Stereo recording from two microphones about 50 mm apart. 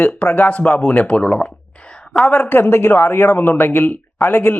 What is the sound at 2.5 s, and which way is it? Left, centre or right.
Speech, left.